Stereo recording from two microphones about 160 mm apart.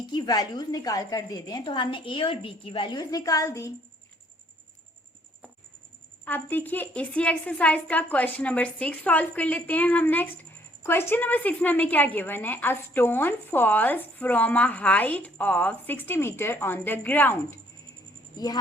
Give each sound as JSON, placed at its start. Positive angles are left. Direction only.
{"t": 0.1, "sound": "a woman's voice", "side_deg": 25}
{"t": 6.2, "sound": "a woman's voice", "side_deg": 10}